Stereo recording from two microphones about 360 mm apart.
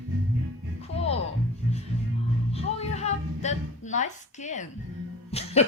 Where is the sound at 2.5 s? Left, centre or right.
Centre.